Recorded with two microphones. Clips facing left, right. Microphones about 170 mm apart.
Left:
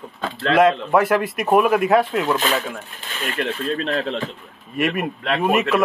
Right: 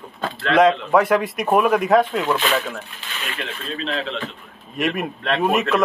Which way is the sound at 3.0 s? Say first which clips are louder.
Left 1 dB; 45° left (ahead or behind).